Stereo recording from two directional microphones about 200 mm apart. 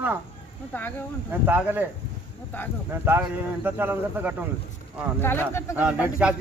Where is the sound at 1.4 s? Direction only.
10° right (ahead or behind).